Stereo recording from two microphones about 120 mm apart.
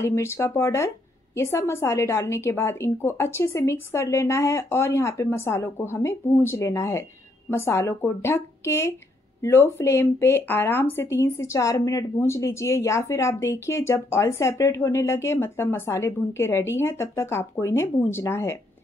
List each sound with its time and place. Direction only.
0.0 s a woman's voice: 20° left (ahead or behind)